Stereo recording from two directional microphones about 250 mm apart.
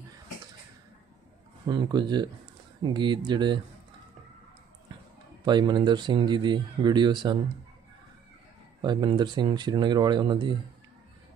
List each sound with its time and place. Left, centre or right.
1.7 s speech: centre
5.4 s speech: centre
8.8 s speech: centre